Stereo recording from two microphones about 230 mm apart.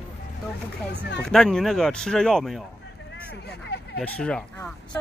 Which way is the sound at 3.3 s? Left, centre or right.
Left.